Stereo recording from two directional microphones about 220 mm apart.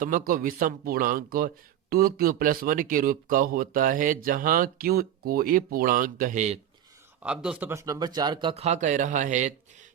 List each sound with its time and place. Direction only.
0.0 s a man's voice: 40° right (ahead or behind)
7.2 s speech: 5° right (ahead or behind); by 9.5 s 35° right (ahead or behind)